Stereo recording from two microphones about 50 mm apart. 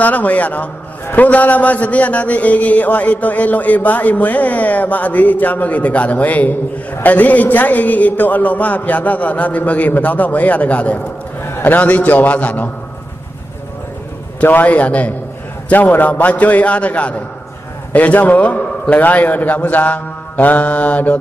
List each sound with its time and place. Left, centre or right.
0.0 s a man's voice: left
14.4 s a man's voice: left